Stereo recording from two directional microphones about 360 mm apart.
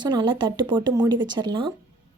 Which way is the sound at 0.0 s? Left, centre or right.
Centre.